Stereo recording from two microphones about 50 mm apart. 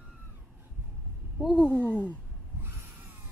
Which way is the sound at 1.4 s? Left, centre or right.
Centre.